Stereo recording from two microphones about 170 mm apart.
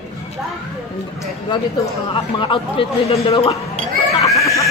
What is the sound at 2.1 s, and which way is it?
Speech, 30° left (ahead or behind).